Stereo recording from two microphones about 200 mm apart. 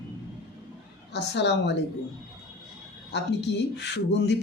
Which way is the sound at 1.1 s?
60° left (ahead or behind).